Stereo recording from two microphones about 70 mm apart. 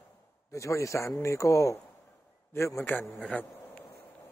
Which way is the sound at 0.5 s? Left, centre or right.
Left.